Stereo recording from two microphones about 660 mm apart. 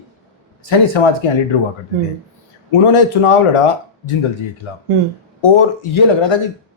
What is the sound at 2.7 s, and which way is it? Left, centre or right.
Speech, left.